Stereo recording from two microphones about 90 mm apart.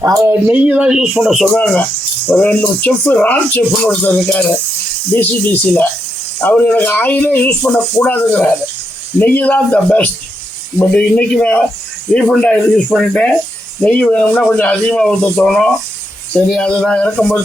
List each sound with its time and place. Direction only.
0.0 s speech: 30° right (ahead or behind)
0.4 s speech: 15° right (ahead or behind)
2.2 s speech: 15° left (ahead or behind)